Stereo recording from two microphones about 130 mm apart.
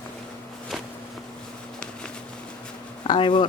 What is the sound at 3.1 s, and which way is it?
Speech, 35° left (ahead or behind).